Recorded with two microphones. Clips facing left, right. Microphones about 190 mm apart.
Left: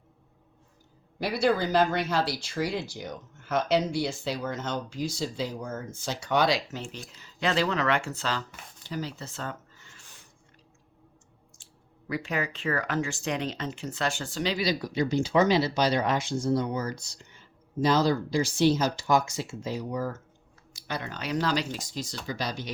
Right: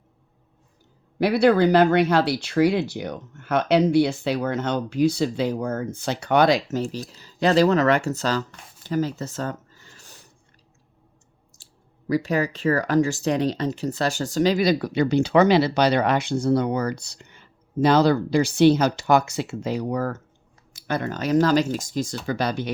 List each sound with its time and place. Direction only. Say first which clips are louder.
1.2 s speech: right 8 dB; 65° right (ahead or behind); by 10.2 s 40° right (ahead or behind)
11.6 s speech: right 11 dB; 40° right (ahead or behind); by 20.2 s 65° right (ahead or behind)
20.7 s speech: right 9 dB; 50° right (ahead or behind)